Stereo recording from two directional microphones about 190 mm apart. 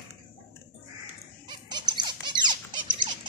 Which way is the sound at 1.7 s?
25° right (ahead or behind).